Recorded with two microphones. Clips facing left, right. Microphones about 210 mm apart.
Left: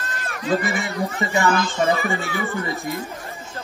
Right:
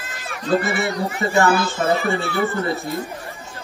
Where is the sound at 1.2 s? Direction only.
15° left (ahead or behind).